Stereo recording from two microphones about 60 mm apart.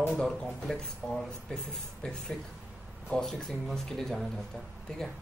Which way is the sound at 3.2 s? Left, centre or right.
Centre.